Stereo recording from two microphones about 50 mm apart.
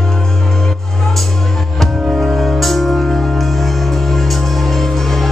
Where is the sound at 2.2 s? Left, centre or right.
Centre.